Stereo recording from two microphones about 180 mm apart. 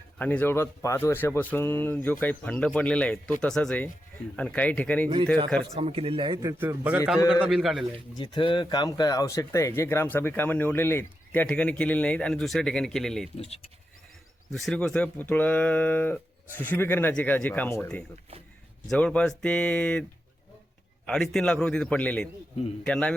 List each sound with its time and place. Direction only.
0.2 s a man's voice: 10° left (ahead or behind)
5.0 s a man's voice: 20° right (ahead or behind)
5.7 s a man's voice: 35° right (ahead or behind); by 7.9 s centre (ahead or behind)
8.1 s speech: 25° left (ahead or behind); by 13.3 s centre (ahead or behind)
13.3 s speech: 35° left (ahead or behind)
14.5 s a man's voice: centre (ahead or behind)
21.1 s a man's voice: centre (ahead or behind)